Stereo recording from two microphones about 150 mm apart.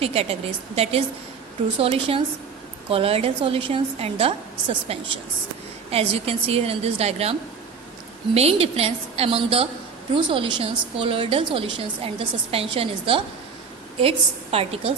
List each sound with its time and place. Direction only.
0.0 s a woman's voice: 40° right (ahead or behind)
8.4 s a woman's voice: 45° right (ahead or behind)